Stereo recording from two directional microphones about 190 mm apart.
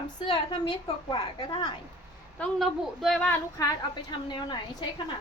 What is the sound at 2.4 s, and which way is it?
Speech, centre (ahead or behind).